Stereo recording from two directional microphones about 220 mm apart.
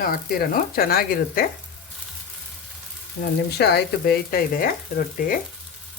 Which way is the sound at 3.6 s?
45° left (ahead or behind).